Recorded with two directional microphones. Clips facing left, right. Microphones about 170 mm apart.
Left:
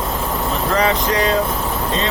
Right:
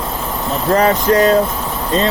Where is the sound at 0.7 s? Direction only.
45° right (ahead or behind).